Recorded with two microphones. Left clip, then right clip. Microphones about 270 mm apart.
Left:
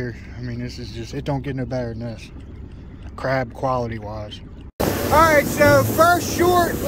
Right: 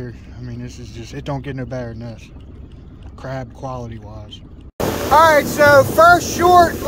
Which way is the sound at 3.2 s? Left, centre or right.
Centre.